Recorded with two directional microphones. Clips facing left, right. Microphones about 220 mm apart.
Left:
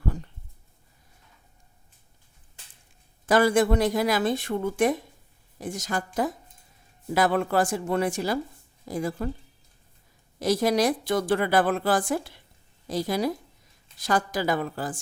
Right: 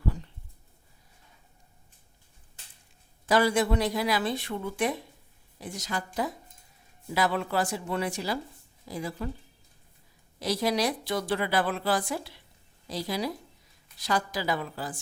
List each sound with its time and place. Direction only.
0.0 s a sound: 50° left (ahead or behind)
3.2 s a woman's voice: 50° left (ahead or behind)
7.1 s a woman's voice: 50° left (ahead or behind)
10.4 s a woman's voice: 50° left (ahead or behind)